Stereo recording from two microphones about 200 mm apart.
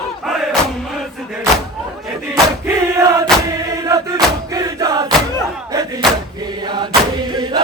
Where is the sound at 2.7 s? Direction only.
15° right (ahead or behind).